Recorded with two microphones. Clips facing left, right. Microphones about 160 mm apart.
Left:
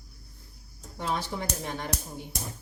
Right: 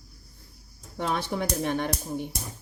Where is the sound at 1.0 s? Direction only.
65° right (ahead or behind).